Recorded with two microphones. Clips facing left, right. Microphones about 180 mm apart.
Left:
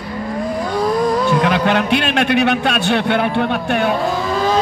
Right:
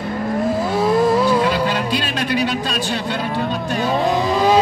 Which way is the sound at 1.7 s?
75° left (ahead or behind).